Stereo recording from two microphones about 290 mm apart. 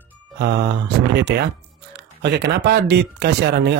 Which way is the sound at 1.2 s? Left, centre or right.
Right.